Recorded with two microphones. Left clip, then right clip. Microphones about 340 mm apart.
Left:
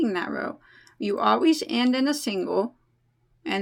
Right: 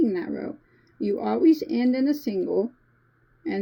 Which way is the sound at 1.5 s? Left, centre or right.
Centre.